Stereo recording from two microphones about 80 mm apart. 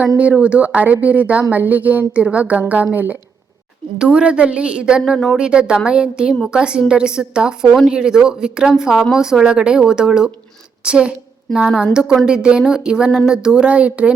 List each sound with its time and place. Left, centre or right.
0.2 s speech: centre
3.9 s speech: centre